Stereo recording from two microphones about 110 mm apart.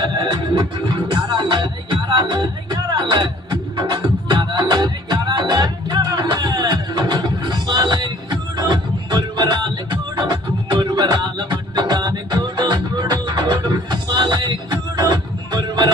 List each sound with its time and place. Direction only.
0.0 s music: 40° right (ahead or behind)